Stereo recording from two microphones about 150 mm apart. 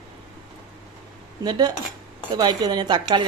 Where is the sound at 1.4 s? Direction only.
30° right (ahead or behind).